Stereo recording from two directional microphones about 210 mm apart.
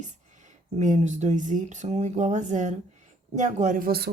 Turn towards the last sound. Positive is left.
turn(degrees=-45)  # may be behind; listen again after turning